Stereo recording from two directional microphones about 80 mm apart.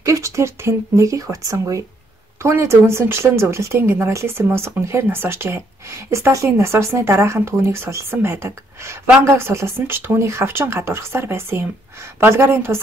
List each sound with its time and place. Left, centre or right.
0.0 s speech: right